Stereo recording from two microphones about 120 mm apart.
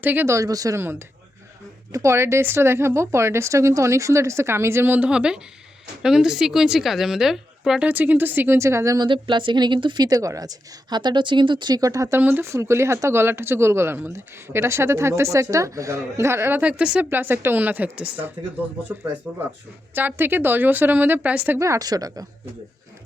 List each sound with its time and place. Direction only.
0.0 s a woman's voice: 15° right (ahead or behind)
0.3 s a woman's voice: 30° right (ahead or behind); by 7.9 s 5° right (ahead or behind)
7.9 s speech: 15° right (ahead or behind)
9.0 s speech: 45° right (ahead or behind)
10.1 s a woman's voice: 30° right (ahead or behind); by 21.6 s 15° right (ahead or behind)
21.6 s a woman's voice: 30° right (ahead or behind)